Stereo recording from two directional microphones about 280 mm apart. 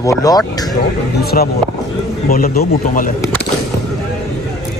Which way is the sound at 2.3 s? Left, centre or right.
Left.